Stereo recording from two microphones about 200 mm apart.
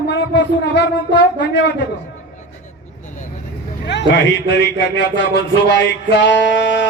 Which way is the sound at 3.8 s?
60° left (ahead or behind).